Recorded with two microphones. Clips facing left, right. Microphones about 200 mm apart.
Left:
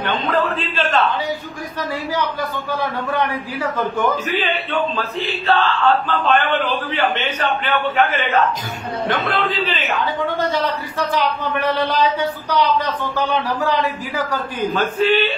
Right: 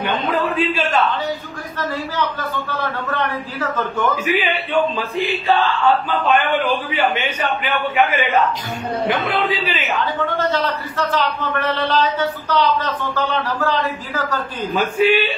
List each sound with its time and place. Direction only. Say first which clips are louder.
0.0 s a man's voice: even; 15° right (ahead or behind)
2.7 s a man's voice: left 4 dB; 15° left (ahead or behind)
4.1 s a man's voice: right 1 dB; 10° right (ahead or behind)
9.6 s a man's voice: left 1 dB; 10° right (ahead or behind)
9.9 s a man's voice: even; 10° left (ahead or behind)
14.7 s a man's voice: right 2 dB; 10° right (ahead or behind)